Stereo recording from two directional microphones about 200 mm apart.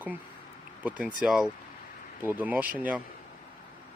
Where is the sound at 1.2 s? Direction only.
Centre (ahead or behind).